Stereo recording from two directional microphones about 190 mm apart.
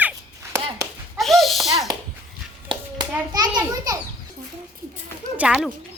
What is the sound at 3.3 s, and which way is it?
Speech, 20° right (ahead or behind).